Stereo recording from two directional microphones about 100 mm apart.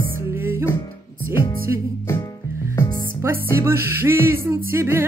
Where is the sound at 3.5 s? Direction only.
25° right (ahead or behind).